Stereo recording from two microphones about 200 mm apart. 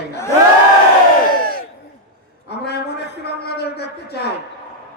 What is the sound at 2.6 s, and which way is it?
A man's voice, 55° left (ahead or behind).